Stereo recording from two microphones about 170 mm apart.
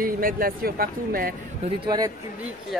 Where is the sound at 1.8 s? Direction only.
25° right (ahead or behind).